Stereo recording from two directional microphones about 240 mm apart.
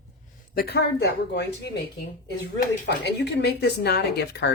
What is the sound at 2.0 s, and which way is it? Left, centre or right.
Speech, left.